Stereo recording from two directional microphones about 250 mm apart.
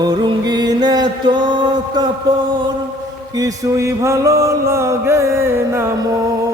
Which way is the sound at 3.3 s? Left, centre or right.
Centre.